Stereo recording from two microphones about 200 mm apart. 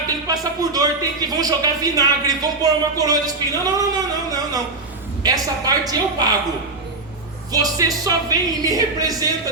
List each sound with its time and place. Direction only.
0.3 s speech: 20° right (ahead or behind)
7.5 s speech: 20° right (ahead or behind)